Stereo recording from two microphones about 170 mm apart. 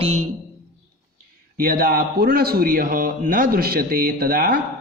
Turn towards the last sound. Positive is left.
turn(degrees=-55)  # may be behind; listen again after turning